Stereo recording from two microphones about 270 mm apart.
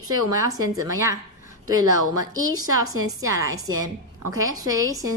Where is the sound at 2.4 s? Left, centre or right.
Right.